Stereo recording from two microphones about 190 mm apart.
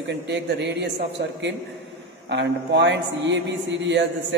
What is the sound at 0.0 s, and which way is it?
A man's voice, 65° right (ahead or behind).